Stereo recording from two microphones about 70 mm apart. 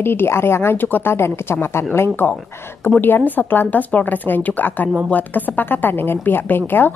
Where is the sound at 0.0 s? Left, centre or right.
Left.